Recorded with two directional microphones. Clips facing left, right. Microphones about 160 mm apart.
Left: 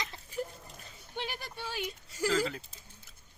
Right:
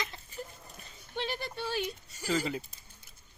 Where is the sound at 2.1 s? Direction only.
90° left.